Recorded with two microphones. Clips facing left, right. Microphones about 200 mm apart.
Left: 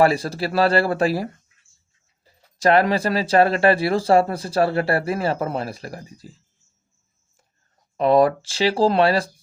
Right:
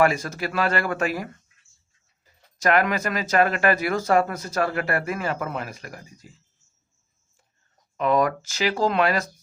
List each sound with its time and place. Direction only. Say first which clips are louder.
0.0 s speech: left 3 dB; 35° left (ahead or behind)
7.9 s speech: left 5 dB; 35° left (ahead or behind)